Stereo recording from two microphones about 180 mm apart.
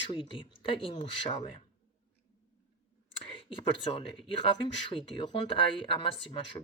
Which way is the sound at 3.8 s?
30° left (ahead or behind).